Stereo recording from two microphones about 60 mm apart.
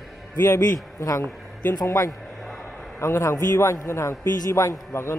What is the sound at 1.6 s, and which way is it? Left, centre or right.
Speech, left.